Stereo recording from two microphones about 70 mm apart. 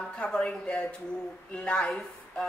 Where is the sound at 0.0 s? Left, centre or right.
Centre.